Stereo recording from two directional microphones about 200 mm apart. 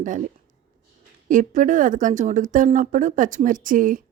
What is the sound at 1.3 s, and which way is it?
A woman's voice, 40° right (ahead or behind).